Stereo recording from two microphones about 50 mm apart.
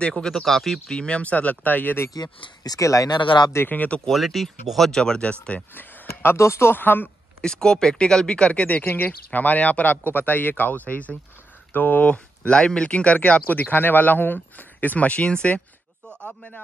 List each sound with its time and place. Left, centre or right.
0.0 s speech: centre
0.3 s speech: centre
0.9 s speech: left
2.8 s speech: left
3.6 s speech: left
4.1 s speech: centre; by 5.6 s left
6.3 s speech: left
6.7 s speech: left
7.4 s speech: centre
8.8 s speech: left
12.1 s speech: centre